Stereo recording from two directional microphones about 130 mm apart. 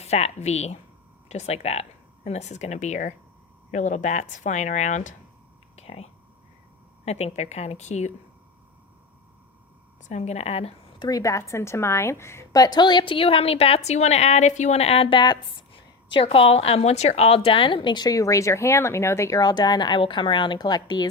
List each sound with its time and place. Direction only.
0.0 s a woman's voice: 55° left (ahead or behind)
5.7 s whispering: 55° left (ahead or behind)
7.0 s a woman's voice: 55° left (ahead or behind)
10.0 s a woman's voice: 65° left (ahead or behind)
11.0 s a woman's voice: 25° left (ahead or behind)